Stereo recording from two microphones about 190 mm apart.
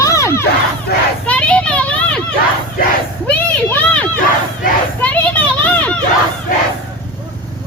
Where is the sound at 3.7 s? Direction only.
5° left (ahead or behind).